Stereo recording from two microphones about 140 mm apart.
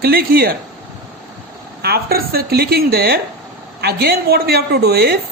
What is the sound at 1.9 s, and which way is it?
Speech, 90° right.